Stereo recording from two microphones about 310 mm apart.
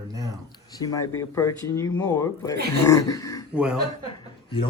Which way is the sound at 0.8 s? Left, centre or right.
Centre.